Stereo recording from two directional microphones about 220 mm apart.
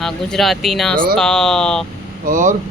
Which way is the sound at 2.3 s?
35° right (ahead or behind).